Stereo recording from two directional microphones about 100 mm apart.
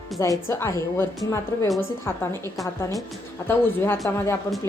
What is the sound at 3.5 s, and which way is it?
A woman's voice, 25° left (ahead or behind).